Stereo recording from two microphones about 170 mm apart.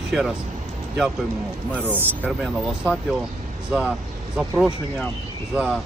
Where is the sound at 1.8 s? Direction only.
10° right (ahead or behind).